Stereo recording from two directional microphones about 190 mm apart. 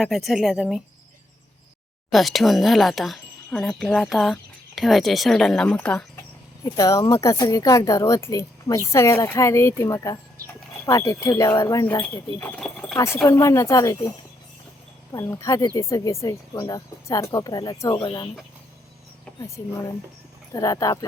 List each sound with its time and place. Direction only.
0.0 s speech: centre (ahead or behind)
2.0 s speech: centre (ahead or behind)
13.2 s speech: 15° left (ahead or behind)
15.1 s speech: 15° left (ahead or behind)
20.5 s speech: 15° left (ahead or behind)